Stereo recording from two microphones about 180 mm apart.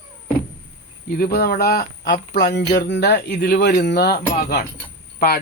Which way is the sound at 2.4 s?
70° left (ahead or behind).